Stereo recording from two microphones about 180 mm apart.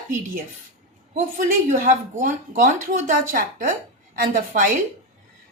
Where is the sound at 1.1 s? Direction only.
50° right (ahead or behind).